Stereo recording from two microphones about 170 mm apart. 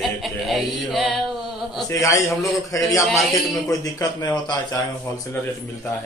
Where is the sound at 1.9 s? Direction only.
15° left (ahead or behind).